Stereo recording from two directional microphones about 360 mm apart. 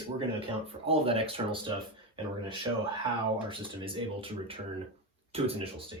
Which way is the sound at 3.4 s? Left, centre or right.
Centre.